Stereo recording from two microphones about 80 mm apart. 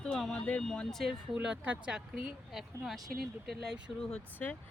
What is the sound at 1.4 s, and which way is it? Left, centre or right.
Speech, centre.